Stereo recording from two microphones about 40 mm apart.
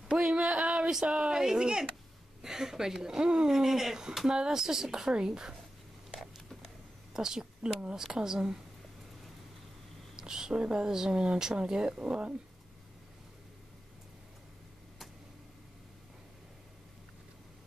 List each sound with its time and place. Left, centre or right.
0.3 s speech: right
7.2 s a woman's voice: centre
10.1 s a sound: centre
10.6 s speech: right